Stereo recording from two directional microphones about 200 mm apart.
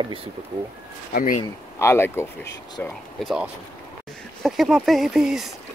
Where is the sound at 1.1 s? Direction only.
45° left (ahead or behind).